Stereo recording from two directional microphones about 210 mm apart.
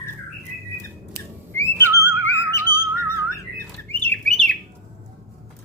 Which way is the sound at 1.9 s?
15° right (ahead or behind).